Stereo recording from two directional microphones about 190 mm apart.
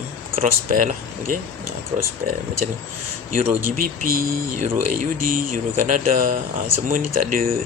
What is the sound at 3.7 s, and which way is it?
Speech, 50° right (ahead or behind).